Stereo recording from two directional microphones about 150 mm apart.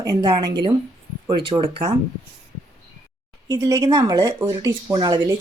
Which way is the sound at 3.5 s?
25° right (ahead or behind).